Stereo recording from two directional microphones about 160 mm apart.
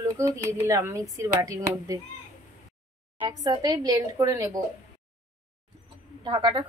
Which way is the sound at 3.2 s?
25° right (ahead or behind).